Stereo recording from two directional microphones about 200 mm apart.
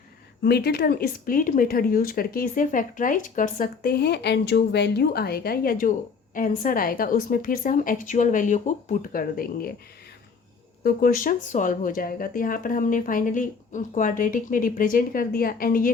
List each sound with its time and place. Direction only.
0.4 s speech: 55° left (ahead or behind)
10.8 s speech: 45° left (ahead or behind)